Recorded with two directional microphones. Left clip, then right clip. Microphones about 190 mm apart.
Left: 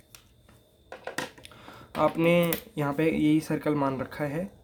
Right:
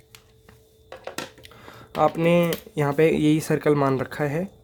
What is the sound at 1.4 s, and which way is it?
Speech, 35° right (ahead or behind).